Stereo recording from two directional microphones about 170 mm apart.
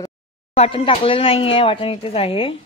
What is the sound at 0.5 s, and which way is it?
Speech, 35° left (ahead or behind).